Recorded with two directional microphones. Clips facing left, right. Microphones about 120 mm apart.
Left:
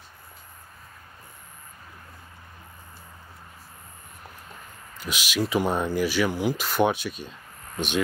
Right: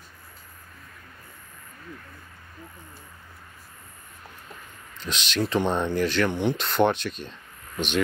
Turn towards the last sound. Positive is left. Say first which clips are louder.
# right 1 dB
turn(degrees=10)  # may be behind; listen again after turning